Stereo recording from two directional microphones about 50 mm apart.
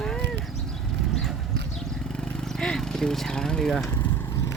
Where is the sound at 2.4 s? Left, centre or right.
Centre.